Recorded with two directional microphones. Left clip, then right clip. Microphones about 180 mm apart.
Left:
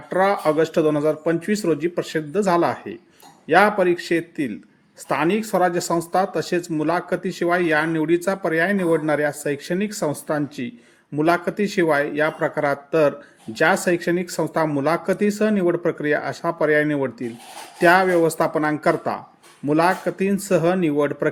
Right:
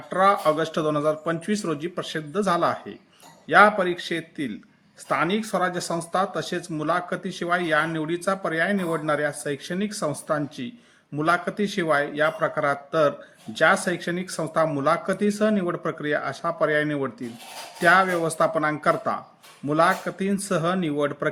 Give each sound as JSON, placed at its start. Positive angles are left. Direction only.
{"t": 0.1, "sound": "speech", "side_deg": 20}